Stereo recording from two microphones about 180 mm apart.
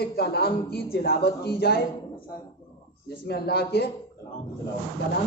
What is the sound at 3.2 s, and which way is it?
Speech, 60° left (ahead or behind).